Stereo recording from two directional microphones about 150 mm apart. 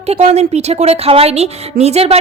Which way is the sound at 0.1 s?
50° right (ahead or behind).